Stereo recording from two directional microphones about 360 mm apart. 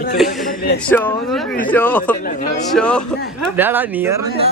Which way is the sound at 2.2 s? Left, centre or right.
Left.